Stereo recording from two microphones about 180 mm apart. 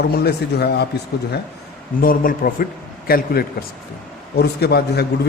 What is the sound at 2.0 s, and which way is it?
A man's voice, 55° left (ahead or behind).